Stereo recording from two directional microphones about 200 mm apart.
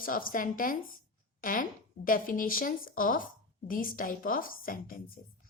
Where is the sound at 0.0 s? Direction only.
45° left (ahead or behind).